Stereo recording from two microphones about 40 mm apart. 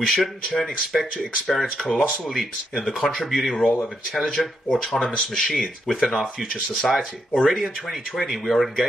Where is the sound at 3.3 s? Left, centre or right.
Centre.